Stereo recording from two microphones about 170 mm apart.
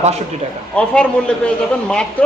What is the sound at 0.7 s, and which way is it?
A man's voice, 5° left (ahead or behind).